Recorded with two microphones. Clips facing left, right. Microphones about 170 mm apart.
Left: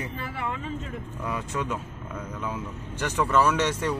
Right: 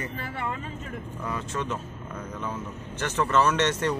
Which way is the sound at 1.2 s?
10° left (ahead or behind).